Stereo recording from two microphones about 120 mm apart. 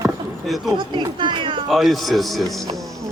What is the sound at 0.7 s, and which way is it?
Cat, 40° right (ahead or behind).